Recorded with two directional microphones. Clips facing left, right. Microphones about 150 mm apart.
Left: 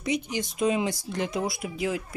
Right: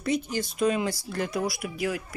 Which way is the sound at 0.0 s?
15° left (ahead or behind).